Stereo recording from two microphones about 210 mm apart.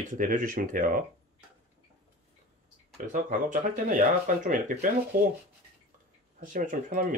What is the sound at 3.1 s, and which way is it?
Speech, 40° right (ahead or behind).